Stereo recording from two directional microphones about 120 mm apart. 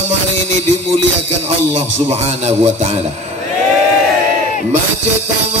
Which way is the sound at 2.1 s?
60° right (ahead or behind).